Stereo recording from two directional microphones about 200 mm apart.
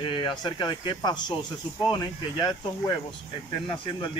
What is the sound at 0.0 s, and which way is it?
Speech, 25° left (ahead or behind).